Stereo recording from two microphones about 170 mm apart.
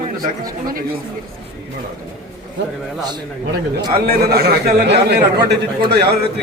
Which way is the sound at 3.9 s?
65° right (ahead or behind).